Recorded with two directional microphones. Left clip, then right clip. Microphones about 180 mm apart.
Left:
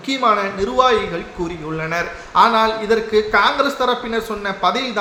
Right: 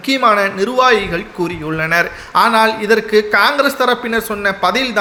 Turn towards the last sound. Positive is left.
turn(degrees=-25)  # may be behind; listen again after turning